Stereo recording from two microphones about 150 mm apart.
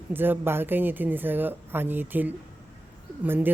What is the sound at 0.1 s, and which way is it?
Speech, 15° right (ahead or behind).